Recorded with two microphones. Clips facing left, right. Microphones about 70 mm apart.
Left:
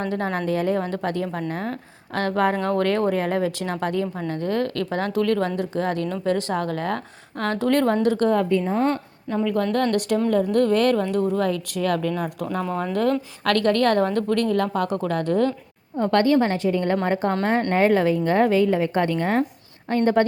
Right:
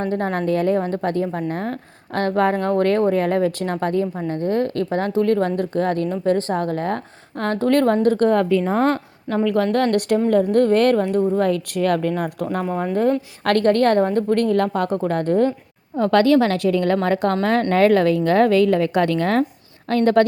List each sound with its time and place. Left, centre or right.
0.0 s a woman's voice: right
8.4 s a woman's voice: right
9.7 s speech: right
12.6 s speech: right
13.4 s a woman's voice: right
14.3 s a woman's voice: right
16.0 s a woman's voice: right
19.9 s a woman's voice: right